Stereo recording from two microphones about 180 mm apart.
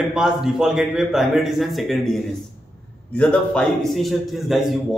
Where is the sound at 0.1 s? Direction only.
5° right (ahead or behind).